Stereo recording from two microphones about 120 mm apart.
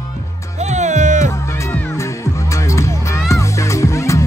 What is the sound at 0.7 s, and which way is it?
Music, 80° right.